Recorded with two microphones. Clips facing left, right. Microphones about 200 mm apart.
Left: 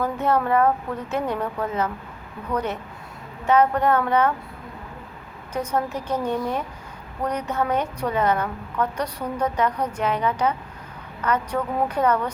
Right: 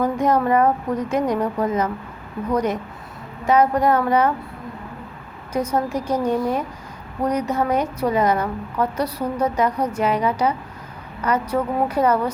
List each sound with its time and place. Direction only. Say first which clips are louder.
0.0 s a woman's voice: right 3 dB; 10° right (ahead or behind)
5.5 s a woman's voice: right 4 dB; 10° right (ahead or behind)